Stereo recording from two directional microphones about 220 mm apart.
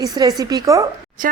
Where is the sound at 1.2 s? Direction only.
40° right (ahead or behind).